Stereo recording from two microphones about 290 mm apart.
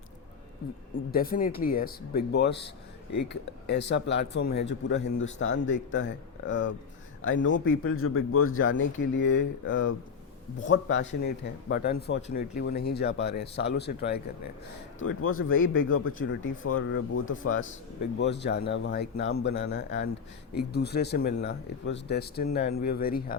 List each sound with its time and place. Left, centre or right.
1.1 s speech: left
3.7 s speech: left
14.9 s speech: left